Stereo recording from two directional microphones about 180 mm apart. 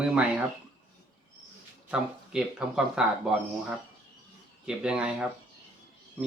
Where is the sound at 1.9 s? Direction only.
5° right (ahead or behind).